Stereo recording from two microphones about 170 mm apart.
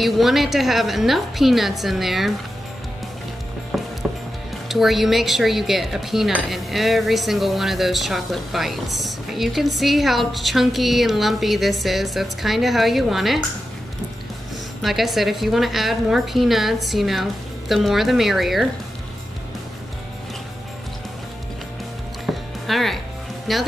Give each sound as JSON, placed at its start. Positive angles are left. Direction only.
{"t": 0.0, "sound": "speech", "side_deg": 0}
{"t": 3.7, "sound": "mechanisms", "side_deg": 0}
{"t": 4.6, "sound": "speech", "side_deg": 0}
{"t": 14.8, "sound": "speech", "side_deg": 0}
{"t": 22.2, "sound": "music", "side_deg": 0}
{"t": 23.5, "sound": "speech", "side_deg": 0}